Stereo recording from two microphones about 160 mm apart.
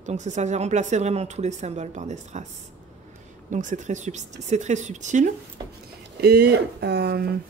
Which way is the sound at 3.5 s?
50° right (ahead or behind).